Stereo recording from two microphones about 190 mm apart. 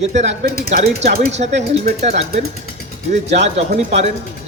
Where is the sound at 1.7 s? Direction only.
35° right (ahead or behind).